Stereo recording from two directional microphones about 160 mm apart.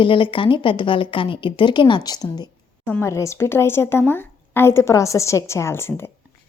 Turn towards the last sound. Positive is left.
turn(degrees=15)  # may be behind; listen again after turning